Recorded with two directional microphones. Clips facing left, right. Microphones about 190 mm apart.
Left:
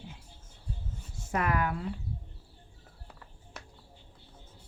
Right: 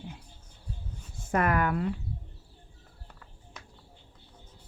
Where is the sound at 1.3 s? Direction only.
55° right (ahead or behind).